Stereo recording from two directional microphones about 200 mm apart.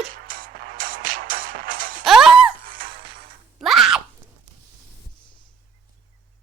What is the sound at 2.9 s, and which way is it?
Music, 25° right (ahead or behind).